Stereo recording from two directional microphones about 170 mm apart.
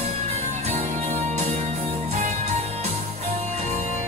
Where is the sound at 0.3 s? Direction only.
40° right (ahead or behind).